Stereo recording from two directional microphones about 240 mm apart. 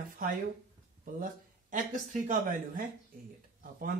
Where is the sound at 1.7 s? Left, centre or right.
Right.